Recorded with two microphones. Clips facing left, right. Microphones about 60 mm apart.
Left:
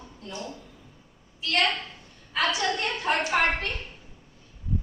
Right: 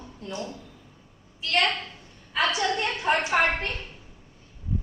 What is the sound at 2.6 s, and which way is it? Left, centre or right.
A woman's voice, centre.